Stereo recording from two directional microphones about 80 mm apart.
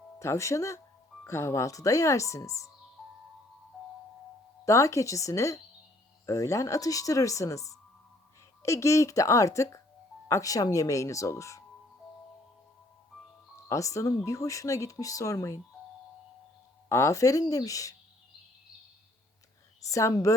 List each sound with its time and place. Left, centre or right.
0.2 s speech: left
4.6 s speech: left
13.7 s speech: left
16.9 s speech: left
19.9 s speech: left